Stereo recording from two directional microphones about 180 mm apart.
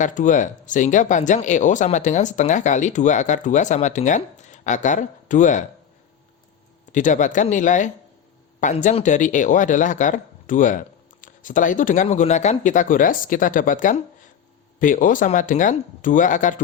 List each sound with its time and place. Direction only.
0.0 s speech: 45° left (ahead or behind)
6.9 s speech: 45° left (ahead or behind)